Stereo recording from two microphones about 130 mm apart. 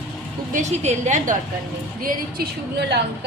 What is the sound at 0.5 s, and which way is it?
Speech, 60° right (ahead or behind).